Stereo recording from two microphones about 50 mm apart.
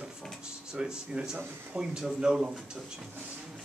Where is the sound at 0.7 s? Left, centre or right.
Centre.